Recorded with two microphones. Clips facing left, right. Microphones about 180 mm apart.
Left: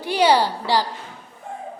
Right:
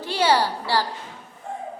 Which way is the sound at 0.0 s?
15° left (ahead or behind).